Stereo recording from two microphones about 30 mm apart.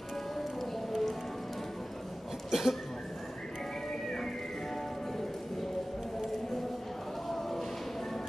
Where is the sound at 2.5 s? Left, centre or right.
Centre.